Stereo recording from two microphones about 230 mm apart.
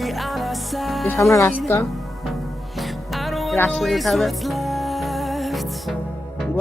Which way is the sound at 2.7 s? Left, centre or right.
Centre.